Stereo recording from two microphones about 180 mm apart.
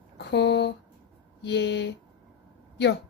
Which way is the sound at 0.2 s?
70° left (ahead or behind).